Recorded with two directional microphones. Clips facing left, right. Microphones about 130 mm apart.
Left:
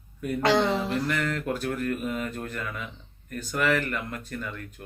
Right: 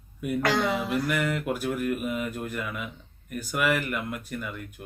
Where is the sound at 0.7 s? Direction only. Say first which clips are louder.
Even; 10° right (ahead or behind).